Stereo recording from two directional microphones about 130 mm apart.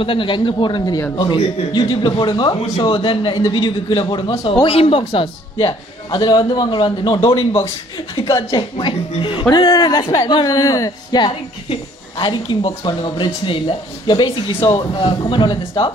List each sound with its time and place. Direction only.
0.0 s a woman's voice: 40° left (ahead or behind)